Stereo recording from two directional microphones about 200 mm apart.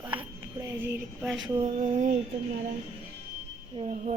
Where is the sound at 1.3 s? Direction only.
Centre (ahead or behind).